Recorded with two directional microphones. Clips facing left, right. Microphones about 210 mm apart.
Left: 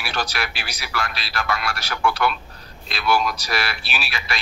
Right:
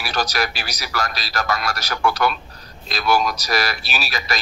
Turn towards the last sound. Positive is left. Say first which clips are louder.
# right 3 dB
turn(degrees=-40)  # may be behind; listen again after turning